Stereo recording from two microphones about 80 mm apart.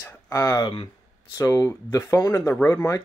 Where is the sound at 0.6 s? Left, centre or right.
Left.